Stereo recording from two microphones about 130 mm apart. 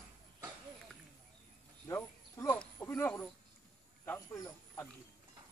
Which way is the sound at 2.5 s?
10° left (ahead or behind).